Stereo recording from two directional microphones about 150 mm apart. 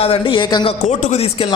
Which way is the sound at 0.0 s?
40° left (ahead or behind).